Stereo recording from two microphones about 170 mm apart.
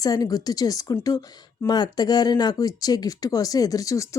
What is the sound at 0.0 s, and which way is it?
Speech, 20° left (ahead or behind).